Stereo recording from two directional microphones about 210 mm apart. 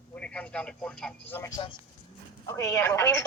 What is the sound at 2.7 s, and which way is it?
Speech, 10° left (ahead or behind).